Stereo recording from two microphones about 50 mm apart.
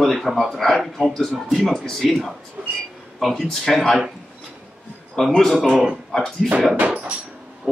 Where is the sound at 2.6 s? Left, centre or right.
Centre.